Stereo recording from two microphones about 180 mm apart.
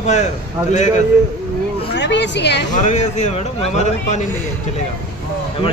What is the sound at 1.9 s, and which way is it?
Speech, 75° left (ahead or behind).